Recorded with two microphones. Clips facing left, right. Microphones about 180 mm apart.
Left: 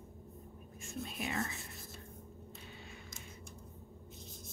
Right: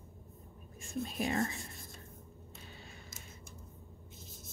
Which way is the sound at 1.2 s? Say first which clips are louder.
Right 5 dB; 40° right (ahead or behind).